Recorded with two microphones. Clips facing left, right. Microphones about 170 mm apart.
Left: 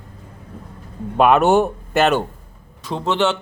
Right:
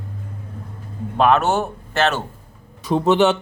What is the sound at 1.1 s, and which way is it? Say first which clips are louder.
Speech: left 3 dB; 5° left (ahead or behind).